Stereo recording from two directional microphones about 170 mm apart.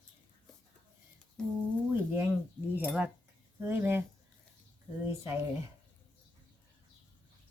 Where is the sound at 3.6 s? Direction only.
15° right (ahead or behind).